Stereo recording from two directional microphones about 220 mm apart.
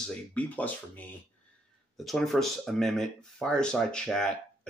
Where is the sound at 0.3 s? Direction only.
5° left (ahead or behind).